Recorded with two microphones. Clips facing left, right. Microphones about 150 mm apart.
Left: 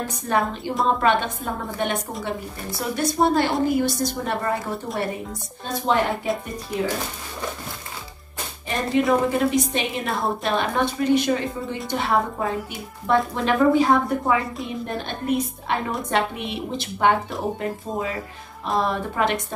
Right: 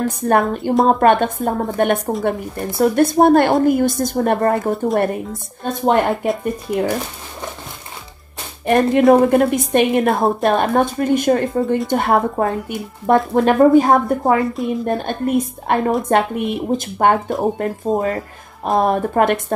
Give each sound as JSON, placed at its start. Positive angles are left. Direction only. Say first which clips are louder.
{"t": 0.1, "sound": "a woman's voice", "louder": "right 7 dB", "side_deg": -50}
{"t": 8.6, "sound": "a woman's voice", "louder": "right 9 dB", "side_deg": -55}
{"t": 14.4, "sound": "a woman's voice", "louder": "right 10 dB", "side_deg": 0}
{"t": 14.9, "sound": "a woman's voice", "louder": "right 3 dB", "side_deg": -50}